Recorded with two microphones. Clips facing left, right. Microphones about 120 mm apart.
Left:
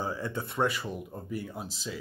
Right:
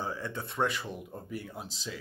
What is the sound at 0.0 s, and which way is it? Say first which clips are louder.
Speech: left 3 dB; 10° left (ahead or behind).